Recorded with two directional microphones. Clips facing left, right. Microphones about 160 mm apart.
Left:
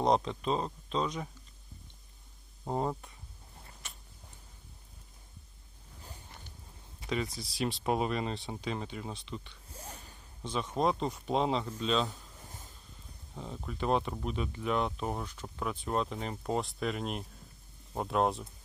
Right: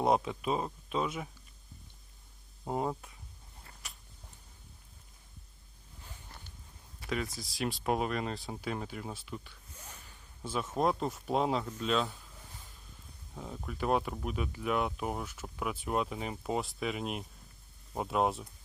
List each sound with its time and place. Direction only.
0.0 s speech: 10° right (ahead or behind)
2.6 s speech: 5° right (ahead or behind)
3.8 s a sound: centre (ahead or behind)
7.3 s speech: centre (ahead or behind)
9.6 s a sound: 30° left (ahead or behind)
10.4 s speech: 5° right (ahead or behind)
13.3 s speech: 5° right (ahead or behind)